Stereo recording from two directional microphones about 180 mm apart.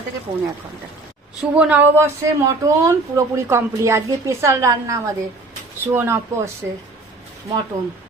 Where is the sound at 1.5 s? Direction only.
5° right (ahead or behind).